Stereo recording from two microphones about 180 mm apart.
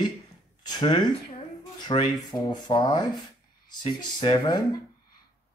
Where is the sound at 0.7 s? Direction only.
25° left (ahead or behind).